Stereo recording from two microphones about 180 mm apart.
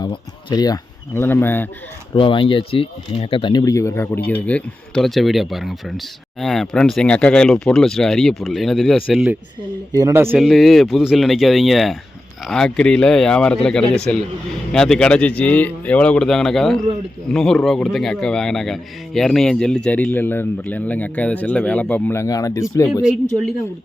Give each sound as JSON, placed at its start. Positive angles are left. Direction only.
{"t": 0.0, "sound": "speech", "side_deg": 20}
{"t": 2.1, "sound": "speech", "side_deg": 30}
{"t": 9.9, "sound": "a man's voice", "side_deg": -20}
{"t": 10.4, "sound": "speech", "side_deg": 0}